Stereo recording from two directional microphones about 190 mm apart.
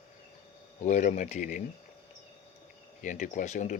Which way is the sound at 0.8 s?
40° left (ahead or behind).